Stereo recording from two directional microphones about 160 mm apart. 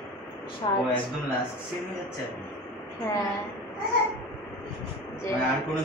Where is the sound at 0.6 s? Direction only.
30° left (ahead or behind).